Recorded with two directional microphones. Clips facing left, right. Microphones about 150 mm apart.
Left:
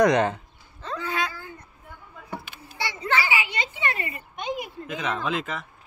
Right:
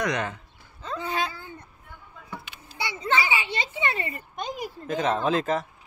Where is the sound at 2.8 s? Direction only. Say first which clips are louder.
Even; 20° right (ahead or behind); by 5.7 s 40° right (ahead or behind).